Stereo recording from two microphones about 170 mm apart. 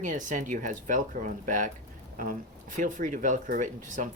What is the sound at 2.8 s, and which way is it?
Speech, 50° right (ahead or behind).